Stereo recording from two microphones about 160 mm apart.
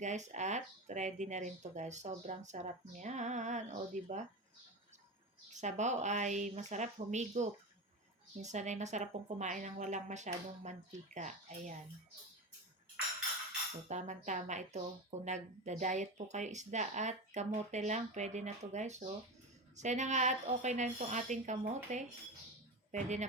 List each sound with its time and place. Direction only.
0.0 s speech: 50° right (ahead or behind)
5.5 s speech: 45° right (ahead or behind)
13.8 s speech: 50° right (ahead or behind)